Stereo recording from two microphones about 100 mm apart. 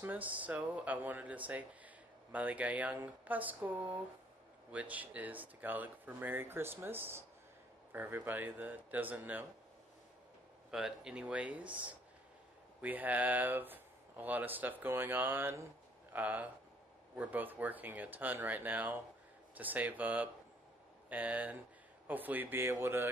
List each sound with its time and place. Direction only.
0.0 s speech: 15° right (ahead or behind)
10.7 s speech: 5° right (ahead or behind); by 23.0 s 25° right (ahead or behind)